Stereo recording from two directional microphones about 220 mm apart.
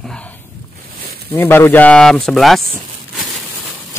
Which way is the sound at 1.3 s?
10° left (ahead or behind).